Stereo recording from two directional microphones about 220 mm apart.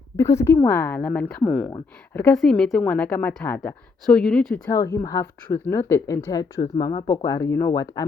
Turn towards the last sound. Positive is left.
turn(degrees=15)  # may be behind; listen again after turning